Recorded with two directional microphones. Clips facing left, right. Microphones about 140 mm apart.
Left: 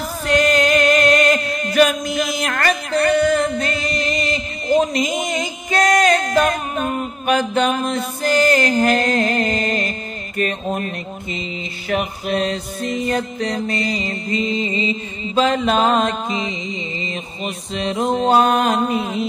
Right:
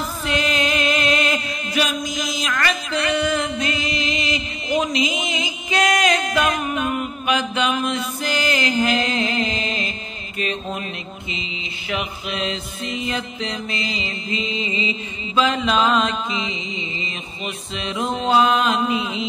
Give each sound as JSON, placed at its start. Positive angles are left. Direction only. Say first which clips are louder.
{"t": 0.3, "sound": "mantra", "louder": "left 7 dB", "side_deg": 45}
{"t": 11.9, "sound": "music", "louder": "left 6 dB", "side_deg": 45}
{"t": 17.7, "sound": "music", "louder": "left 6 dB", "side_deg": 40}